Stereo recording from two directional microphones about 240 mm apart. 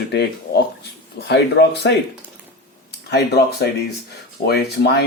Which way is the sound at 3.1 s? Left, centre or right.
Left.